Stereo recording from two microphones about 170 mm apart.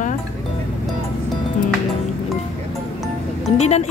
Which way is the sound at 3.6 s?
40° left (ahead or behind).